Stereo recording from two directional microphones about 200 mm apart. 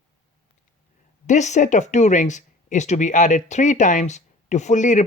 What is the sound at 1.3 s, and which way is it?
Speech, 35° left (ahead or behind).